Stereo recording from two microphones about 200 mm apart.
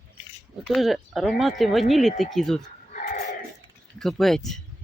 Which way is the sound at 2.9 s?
40° left (ahead or behind).